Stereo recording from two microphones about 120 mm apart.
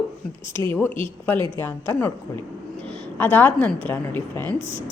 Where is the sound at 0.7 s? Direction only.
15° left (ahead or behind).